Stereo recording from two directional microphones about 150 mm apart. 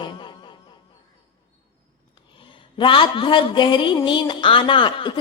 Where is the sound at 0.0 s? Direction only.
30° left (ahead or behind).